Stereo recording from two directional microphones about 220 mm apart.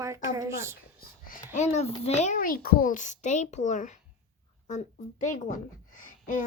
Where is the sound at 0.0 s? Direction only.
15° right (ahead or behind).